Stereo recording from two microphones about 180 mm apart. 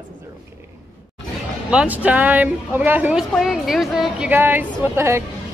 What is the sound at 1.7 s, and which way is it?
Speech, 5° right (ahead or behind).